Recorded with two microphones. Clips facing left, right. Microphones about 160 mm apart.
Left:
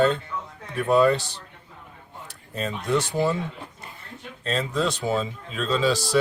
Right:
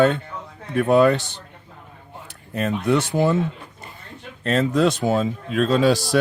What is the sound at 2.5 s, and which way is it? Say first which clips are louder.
Speech: right 5 dB; 65° right (ahead or behind).